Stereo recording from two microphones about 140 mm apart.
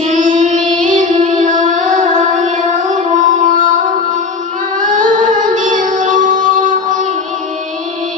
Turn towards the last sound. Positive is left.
turn(degrees=-65)  # may be behind; listen again after turning